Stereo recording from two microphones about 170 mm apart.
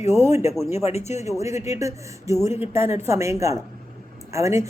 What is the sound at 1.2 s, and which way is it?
Speech, 15° right (ahead or behind).